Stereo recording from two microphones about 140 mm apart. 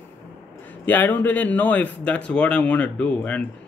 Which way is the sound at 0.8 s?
10° left (ahead or behind).